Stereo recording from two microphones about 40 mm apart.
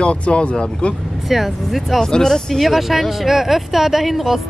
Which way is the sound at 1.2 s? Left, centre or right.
Centre.